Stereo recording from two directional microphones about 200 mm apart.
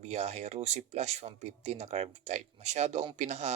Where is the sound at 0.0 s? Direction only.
30° right (ahead or behind).